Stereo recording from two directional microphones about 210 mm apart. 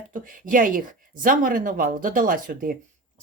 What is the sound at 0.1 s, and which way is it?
Speech, 40° right (ahead or behind).